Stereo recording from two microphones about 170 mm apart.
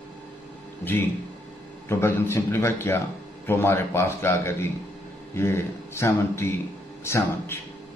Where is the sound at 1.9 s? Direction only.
15° left (ahead or behind).